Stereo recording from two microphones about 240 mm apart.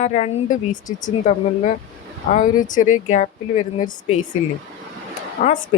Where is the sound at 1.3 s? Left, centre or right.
Left.